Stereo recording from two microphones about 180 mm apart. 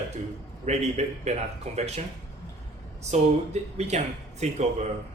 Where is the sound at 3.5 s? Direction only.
40° right (ahead or behind).